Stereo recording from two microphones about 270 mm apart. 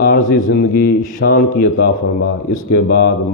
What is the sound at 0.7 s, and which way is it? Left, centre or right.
Speech, left.